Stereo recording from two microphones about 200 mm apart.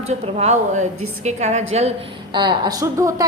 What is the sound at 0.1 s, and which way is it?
A woman's voice, 30° right (ahead or behind).